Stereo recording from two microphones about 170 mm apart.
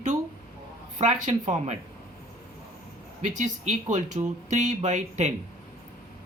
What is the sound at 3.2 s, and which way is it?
Speech, 45° right (ahead or behind).